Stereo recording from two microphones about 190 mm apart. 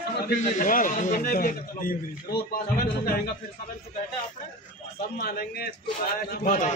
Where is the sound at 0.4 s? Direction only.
45° left (ahead or behind).